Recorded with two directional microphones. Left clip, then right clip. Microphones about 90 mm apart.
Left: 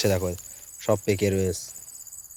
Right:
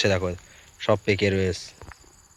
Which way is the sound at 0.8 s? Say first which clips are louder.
Right 2 dB; 30° left (ahead or behind).